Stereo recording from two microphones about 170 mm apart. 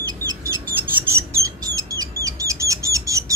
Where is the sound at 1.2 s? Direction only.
20° right (ahead or behind).